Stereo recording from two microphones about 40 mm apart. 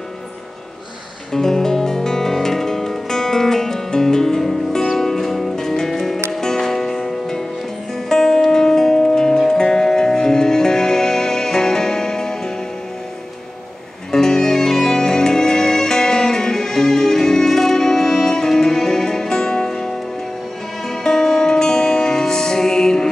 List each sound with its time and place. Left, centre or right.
1.3 s music: centre
14.1 s music: centre